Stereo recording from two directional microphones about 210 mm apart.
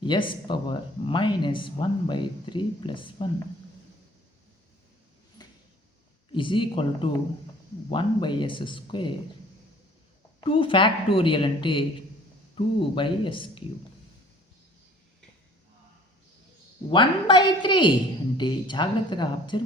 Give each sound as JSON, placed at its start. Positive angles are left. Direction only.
{"t": 0.0, "sound": "speech", "side_deg": 25}
{"t": 5.4, "sound": "a sound", "side_deg": 20}
{"t": 6.3, "sound": "speech", "side_deg": 25}
{"t": 10.4, "sound": "speech", "side_deg": 25}
{"t": 16.9, "sound": "speech", "side_deg": 20}